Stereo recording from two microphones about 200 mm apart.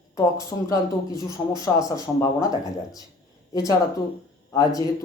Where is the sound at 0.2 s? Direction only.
15° left (ahead or behind).